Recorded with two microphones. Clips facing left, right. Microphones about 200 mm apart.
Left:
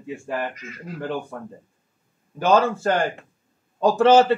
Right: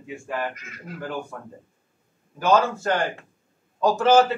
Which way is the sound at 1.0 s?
30° left (ahead or behind).